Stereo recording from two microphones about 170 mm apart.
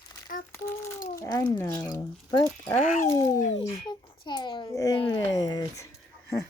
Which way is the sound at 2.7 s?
50° left (ahead or behind).